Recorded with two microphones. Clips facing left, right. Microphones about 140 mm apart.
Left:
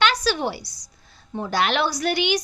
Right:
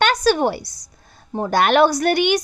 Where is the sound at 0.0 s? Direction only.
50° right (ahead or behind).